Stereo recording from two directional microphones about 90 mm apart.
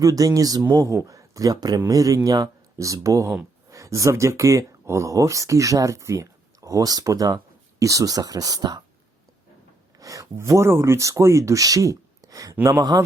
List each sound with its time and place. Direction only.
0.0 s speech: 40° right (ahead or behind)
10.0 s a man's voice: 40° right (ahead or behind)